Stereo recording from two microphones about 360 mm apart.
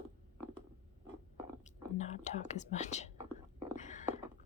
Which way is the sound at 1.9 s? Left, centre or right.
Centre.